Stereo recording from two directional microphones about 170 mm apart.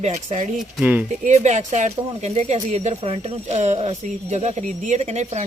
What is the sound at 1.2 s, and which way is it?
Speech, 45° right (ahead or behind).